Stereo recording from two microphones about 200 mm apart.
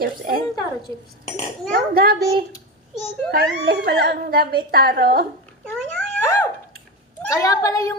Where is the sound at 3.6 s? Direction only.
55° right (ahead or behind).